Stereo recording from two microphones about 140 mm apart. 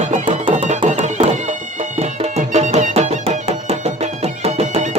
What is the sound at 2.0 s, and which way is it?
Music, 50° right (ahead or behind).